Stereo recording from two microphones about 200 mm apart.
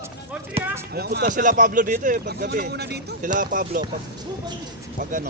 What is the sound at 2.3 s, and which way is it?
Speech, 55° right (ahead or behind).